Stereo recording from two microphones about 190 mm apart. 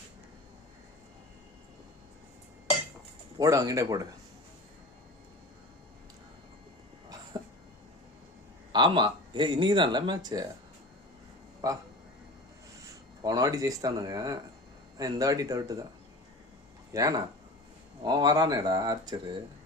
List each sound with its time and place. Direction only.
3.3 s speech: 20° right (ahead or behind)
8.7 s speech: 25° right (ahead or behind)
11.6 s speech: 20° right (ahead or behind)
13.2 s speech: 20° right (ahead or behind)
16.9 s speech: 20° right (ahead or behind)